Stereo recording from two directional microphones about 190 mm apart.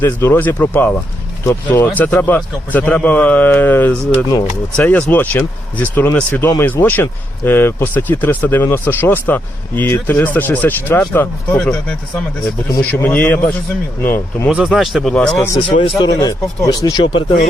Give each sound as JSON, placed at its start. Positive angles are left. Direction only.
{"t": 0.0, "sound": "speech", "side_deg": 10}
{"t": 14.5, "sound": "speech", "side_deg": -5}
{"t": 16.0, "sound": "speech", "side_deg": 20}